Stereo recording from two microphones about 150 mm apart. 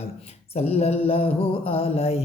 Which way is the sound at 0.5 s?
45° left (ahead or behind).